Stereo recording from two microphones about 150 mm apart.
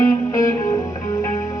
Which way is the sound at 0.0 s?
20° left (ahead or behind).